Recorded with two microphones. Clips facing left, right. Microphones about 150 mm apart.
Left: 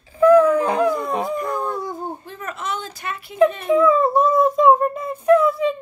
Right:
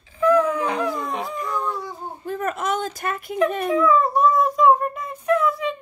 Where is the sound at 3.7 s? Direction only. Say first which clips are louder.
Left 3 dB; 25° left (ahead or behind).